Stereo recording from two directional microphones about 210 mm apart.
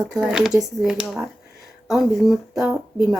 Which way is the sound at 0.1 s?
5° right (ahead or behind).